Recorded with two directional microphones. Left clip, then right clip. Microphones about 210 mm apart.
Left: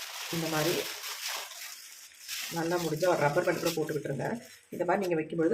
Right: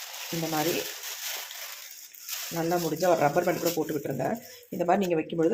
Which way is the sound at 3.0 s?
35° right (ahead or behind).